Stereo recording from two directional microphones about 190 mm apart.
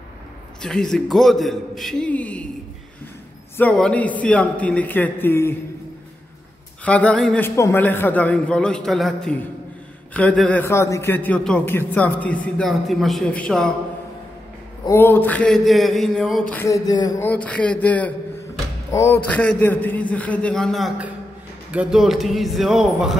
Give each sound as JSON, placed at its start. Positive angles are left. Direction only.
{"t": 0.6, "sound": "a man's voice", "side_deg": 5}
{"t": 3.5, "sound": "a man's voice", "side_deg": 5}
{"t": 6.8, "sound": "a man's voice", "side_deg": 5}
{"t": 14.9, "sound": "a man's voice", "side_deg": 10}
{"t": 16.5, "sound": "a man's voice", "side_deg": 15}
{"t": 17.3, "sound": "a man's voice", "side_deg": 5}